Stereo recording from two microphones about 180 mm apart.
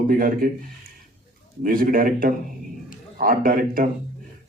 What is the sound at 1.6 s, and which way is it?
A man's voice, 50° right (ahead or behind).